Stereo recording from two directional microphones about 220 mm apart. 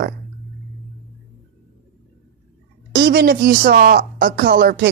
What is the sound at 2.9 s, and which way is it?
Speech, 45° right (ahead or behind).